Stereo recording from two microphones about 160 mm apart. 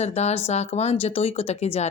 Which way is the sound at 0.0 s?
45° left (ahead or behind).